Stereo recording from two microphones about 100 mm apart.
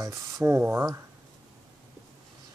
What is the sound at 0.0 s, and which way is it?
Speech, 35° right (ahead or behind).